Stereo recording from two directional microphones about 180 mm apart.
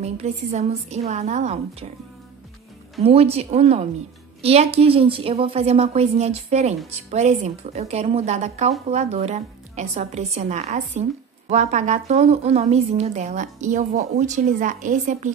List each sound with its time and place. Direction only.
0.0 s a woman's voice: 40° right (ahead or behind)
3.0 s a woman's voice: 35° right (ahead or behind)